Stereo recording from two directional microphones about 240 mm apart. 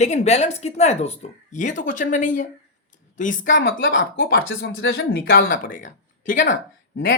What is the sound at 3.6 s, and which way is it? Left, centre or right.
Speech, left.